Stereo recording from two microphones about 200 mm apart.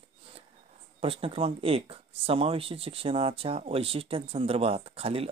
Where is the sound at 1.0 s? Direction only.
25° right (ahead or behind).